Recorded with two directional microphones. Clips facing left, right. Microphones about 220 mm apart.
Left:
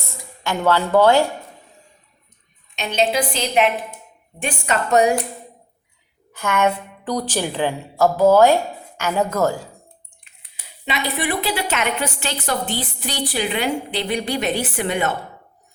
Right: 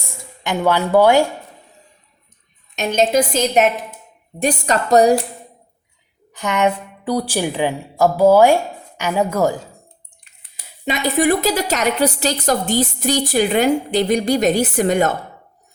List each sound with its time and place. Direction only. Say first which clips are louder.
0.1 s speech: right 2 dB; 15° right (ahead or behind)
2.7 s a woman's voice: right 4 dB; 45° right (ahead or behind)
6.3 s a woman's voice: right 1 dB; 15° right (ahead or behind)
10.8 s a woman's voice: right 7 dB; 45° right (ahead or behind)